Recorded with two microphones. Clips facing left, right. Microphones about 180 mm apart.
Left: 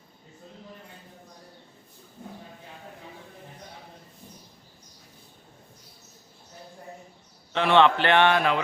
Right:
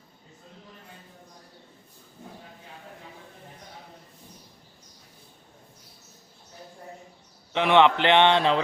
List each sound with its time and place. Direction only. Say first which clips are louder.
7.5 s a man's voice: even; 15° right (ahead or behind)